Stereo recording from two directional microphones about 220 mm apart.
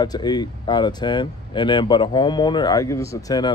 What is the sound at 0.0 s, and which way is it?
Speech, 20° left (ahead or behind).